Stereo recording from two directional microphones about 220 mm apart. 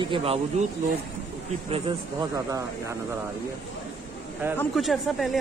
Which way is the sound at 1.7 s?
20° right (ahead or behind).